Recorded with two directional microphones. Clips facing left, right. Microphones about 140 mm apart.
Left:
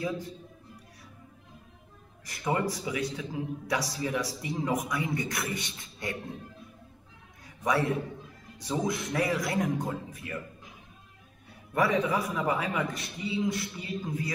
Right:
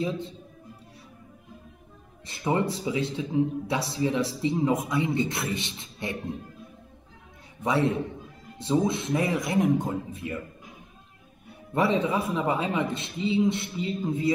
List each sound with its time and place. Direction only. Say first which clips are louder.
2.2 s speech: right 3 dB; 25° right (ahead or behind)
7.6 s speech: right 3 dB; 25° right (ahead or behind)
11.7 s speech: right 2 dB; 25° right (ahead or behind)